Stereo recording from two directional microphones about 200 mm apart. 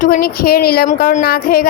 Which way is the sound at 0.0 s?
45° left (ahead or behind).